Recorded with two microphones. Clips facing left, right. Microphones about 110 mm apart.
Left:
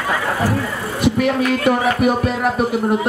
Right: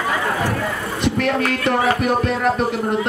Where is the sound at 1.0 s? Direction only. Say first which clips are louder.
Left 3 dB; 10° left (ahead or behind).